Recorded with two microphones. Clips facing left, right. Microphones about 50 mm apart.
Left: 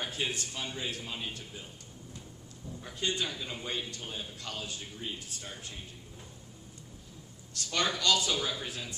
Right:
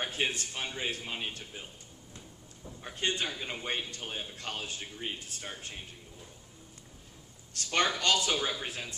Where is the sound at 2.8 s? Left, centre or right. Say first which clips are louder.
Right 1 dB; right.